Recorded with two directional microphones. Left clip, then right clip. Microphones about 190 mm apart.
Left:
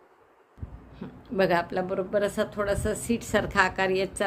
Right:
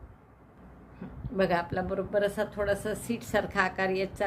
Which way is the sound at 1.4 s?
20° left (ahead or behind).